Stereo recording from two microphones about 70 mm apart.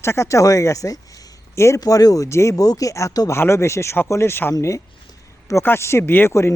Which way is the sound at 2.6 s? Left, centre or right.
Left.